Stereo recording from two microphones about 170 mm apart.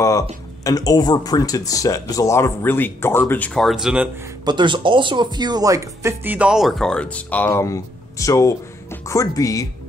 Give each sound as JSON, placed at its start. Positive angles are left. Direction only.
{"t": 0.7, "sound": "speech", "side_deg": 20}
{"t": 4.5, "sound": "speech", "side_deg": -25}